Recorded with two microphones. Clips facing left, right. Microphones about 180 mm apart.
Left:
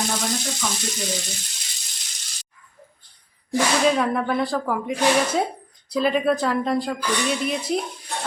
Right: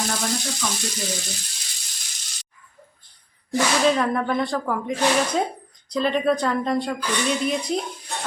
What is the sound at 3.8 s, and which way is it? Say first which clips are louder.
Speech: even; 5° left (ahead or behind).